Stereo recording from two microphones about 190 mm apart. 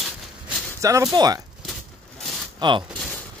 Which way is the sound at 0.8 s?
15° right (ahead or behind).